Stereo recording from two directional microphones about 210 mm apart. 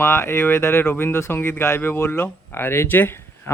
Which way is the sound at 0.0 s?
10° left (ahead or behind).